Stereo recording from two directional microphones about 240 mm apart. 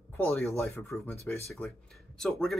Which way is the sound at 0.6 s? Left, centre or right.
Centre.